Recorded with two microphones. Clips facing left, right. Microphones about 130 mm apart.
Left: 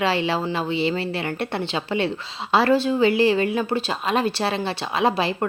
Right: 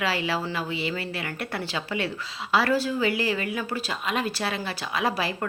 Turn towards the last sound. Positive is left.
turn(degrees=25)  # may be behind; listen again after turning